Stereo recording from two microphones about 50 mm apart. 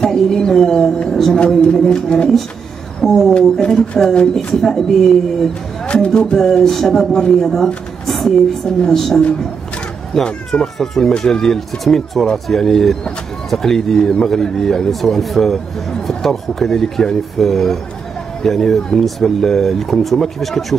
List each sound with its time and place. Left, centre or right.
0.0 s speech: centre
3.6 s a woman's voice: centre
6.0 s a woman's voice: centre
10.2 s speech: centre